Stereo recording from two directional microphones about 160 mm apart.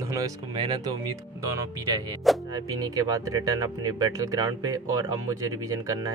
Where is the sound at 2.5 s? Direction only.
20° right (ahead or behind).